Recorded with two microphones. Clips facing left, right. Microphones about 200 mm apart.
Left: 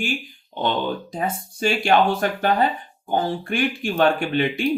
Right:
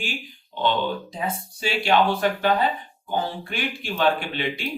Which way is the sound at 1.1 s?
50° left (ahead or behind).